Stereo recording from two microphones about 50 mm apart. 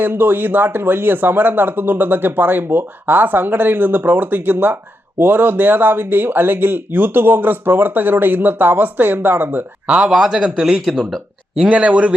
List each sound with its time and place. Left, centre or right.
0.0 s speech: right
9.8 s speech: right
10.8 s speech: centre
11.6 s speech: right